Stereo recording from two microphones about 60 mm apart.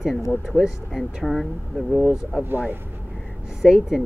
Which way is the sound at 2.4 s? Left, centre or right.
Right.